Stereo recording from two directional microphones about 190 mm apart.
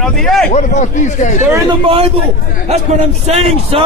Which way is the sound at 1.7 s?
30° right (ahead or behind).